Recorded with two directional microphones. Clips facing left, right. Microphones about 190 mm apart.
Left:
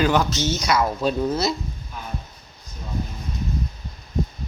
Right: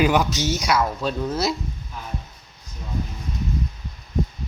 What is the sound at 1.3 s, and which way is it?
Speech, 5° right (ahead or behind).